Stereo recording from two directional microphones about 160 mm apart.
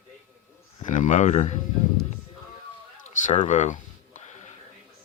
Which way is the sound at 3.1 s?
50° left (ahead or behind).